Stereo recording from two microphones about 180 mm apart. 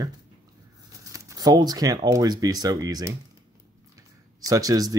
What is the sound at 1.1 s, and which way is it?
Speech, 20° right (ahead or behind).